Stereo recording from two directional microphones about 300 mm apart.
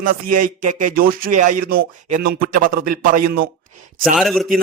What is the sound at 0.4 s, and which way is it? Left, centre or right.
A man's voice, right.